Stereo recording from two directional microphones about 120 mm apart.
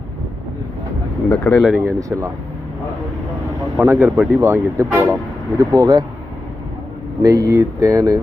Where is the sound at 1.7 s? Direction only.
20° right (ahead or behind).